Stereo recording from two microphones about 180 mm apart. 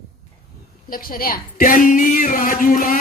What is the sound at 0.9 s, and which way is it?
Speech, 50° left (ahead or behind).